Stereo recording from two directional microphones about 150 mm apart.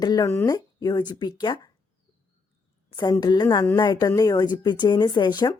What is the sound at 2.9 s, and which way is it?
Speech, 25° left (ahead or behind).